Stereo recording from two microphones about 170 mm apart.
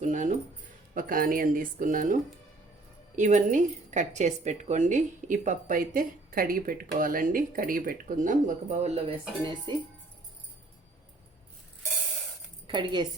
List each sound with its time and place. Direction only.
0.0 s music: 45° right (ahead or behind)
0.9 s speech: 55° right (ahead or behind)
3.2 s speech: 45° right (ahead or behind)
9.4 s speech: 30° right (ahead or behind)
12.6 s speech: 25° right (ahead or behind)